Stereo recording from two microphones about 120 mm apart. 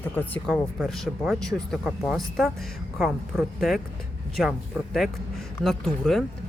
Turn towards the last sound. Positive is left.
turn(degrees=5)  # may be behind; listen again after turning